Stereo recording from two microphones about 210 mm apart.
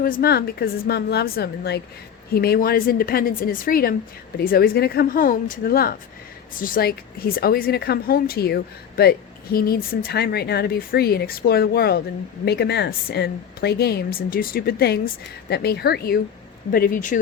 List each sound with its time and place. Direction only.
0.0 s a woman's voice: 45° left (ahead or behind)